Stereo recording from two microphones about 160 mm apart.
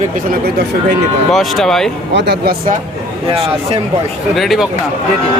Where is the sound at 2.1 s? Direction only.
90° right.